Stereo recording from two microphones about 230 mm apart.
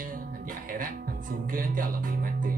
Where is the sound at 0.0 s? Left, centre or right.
Right.